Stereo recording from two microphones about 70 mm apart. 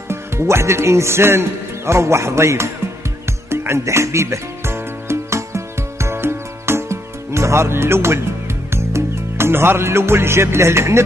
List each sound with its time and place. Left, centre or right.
0.1 s speech: right
3.3 s music: right